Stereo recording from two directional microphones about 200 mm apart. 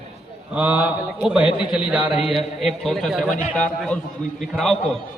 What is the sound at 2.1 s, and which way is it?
Speech, 30° left (ahead or behind).